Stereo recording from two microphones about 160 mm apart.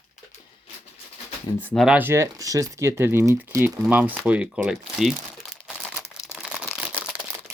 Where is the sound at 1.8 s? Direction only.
10° right (ahead or behind).